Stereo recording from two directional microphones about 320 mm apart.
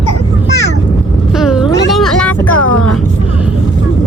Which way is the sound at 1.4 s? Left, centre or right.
Centre.